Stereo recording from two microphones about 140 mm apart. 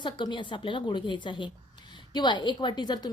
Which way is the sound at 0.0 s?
35° left (ahead or behind).